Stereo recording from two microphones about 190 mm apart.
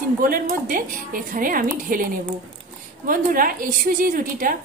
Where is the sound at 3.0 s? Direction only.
50° right (ahead or behind).